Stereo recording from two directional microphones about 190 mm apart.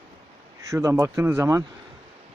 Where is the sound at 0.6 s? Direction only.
15° right (ahead or behind).